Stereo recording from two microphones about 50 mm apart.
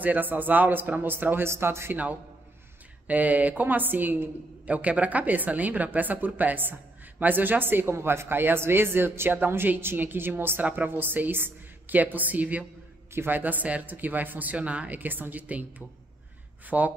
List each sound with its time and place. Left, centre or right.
0.0 s a woman's voice: right
1.5 s speech: right
3.1 s a woman's voice: right
7.9 s a woman's voice: right
13.1 s a woman's voice: right
15.0 s a woman's voice: right
16.6 s a woman's voice: right